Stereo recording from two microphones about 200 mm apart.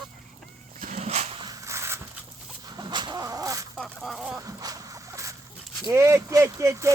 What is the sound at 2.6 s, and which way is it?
Dog, 20° right (ahead or behind).